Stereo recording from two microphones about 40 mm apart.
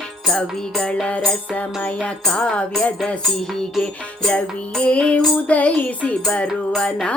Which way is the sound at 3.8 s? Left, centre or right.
Centre.